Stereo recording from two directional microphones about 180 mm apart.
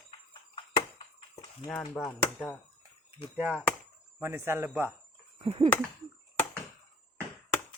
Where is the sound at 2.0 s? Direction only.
10° left (ahead or behind).